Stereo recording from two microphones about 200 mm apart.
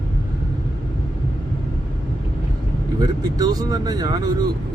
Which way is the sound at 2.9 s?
20° right (ahead or behind).